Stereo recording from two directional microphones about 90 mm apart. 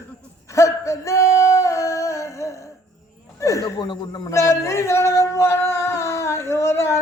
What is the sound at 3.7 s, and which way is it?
Speech, 60° left (ahead or behind).